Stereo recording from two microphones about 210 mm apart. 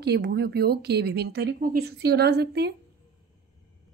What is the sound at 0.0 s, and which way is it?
Speech, 50° right (ahead or behind).